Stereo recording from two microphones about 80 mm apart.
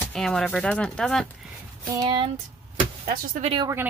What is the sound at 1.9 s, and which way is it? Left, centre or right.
Speech, right.